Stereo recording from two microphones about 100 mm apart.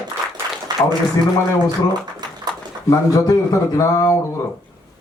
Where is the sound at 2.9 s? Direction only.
40° left (ahead or behind).